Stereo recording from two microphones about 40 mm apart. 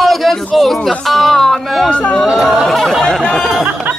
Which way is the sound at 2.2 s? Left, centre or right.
Centre.